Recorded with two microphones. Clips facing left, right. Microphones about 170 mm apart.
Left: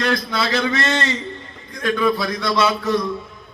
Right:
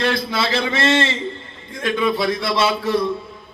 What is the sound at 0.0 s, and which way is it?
A man's voice, 30° right (ahead or behind).